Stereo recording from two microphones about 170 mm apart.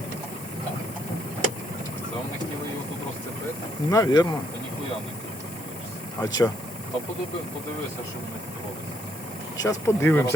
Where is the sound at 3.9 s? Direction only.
20° left (ahead or behind).